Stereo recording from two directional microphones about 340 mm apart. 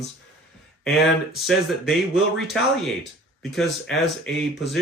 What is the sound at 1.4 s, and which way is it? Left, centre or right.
Speech, centre.